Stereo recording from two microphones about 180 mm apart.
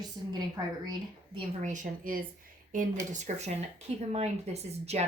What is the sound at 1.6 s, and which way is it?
A woman's voice, 45° right (ahead or behind).